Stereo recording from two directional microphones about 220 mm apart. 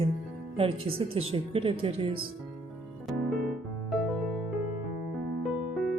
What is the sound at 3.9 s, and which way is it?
Music, centre (ahead or behind).